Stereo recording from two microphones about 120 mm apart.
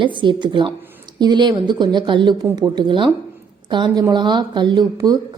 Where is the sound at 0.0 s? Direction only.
40° right (ahead or behind).